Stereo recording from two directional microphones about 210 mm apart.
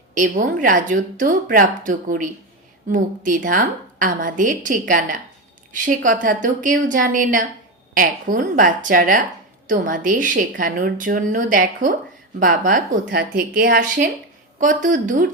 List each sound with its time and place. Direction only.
0.1 s a woman's voice: 40° right (ahead or behind)